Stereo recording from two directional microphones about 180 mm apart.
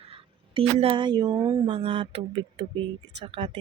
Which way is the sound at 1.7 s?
30° right (ahead or behind).